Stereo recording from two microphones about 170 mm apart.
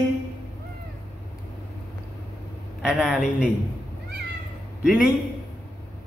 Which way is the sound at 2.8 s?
5° right (ahead or behind).